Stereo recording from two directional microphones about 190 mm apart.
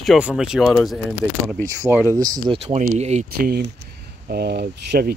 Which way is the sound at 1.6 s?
15° right (ahead or behind).